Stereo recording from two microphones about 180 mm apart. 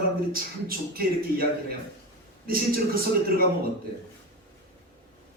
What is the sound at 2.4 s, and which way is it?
Speech, 55° right (ahead or behind).